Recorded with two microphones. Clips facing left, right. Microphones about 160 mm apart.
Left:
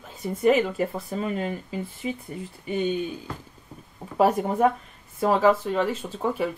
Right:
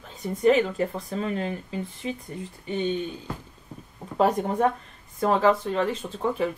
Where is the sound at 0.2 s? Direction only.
5° left (ahead or behind).